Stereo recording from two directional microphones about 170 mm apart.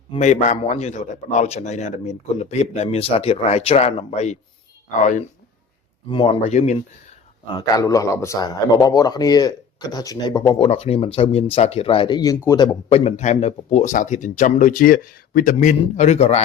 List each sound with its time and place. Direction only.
0.2 s a man's voice: 45° left (ahead or behind)
6.1 s a man's voice: 30° left (ahead or behind)
7.8 s speech: 20° left (ahead or behind)
12.9 s speech: 40° left (ahead or behind)
15.5 s a man's voice: 45° left (ahead or behind)